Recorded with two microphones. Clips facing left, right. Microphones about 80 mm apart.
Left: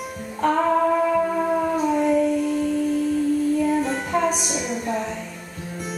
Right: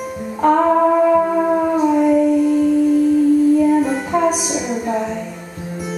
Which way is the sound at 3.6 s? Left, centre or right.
Centre.